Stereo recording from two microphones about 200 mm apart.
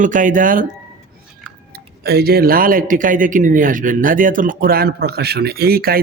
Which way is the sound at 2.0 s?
50° right (ahead or behind).